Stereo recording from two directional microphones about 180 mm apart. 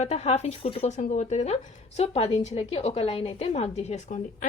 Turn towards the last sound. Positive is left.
turn(degrees=40)  # may be behind; listen again after turning